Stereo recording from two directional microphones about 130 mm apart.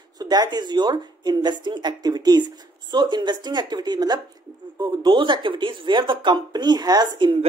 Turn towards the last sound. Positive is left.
turn(degrees=-35)  # may be behind; listen again after turning